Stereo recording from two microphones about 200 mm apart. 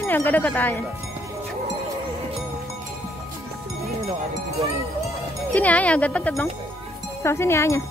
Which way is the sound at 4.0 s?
30° right (ahead or behind).